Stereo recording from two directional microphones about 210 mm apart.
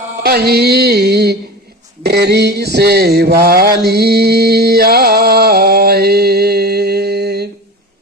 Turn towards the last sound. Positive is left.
turn(degrees=-50)  # may be behind; listen again after turning